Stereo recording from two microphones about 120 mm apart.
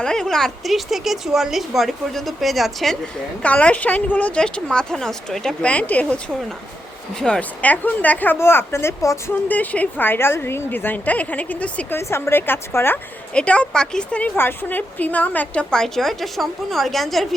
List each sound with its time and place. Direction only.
0.0 s a woman's voice: 5° left (ahead or behind); by 9.3 s 25° left (ahead or behind)
9.5 s a woman's voice: 15° left (ahead or behind)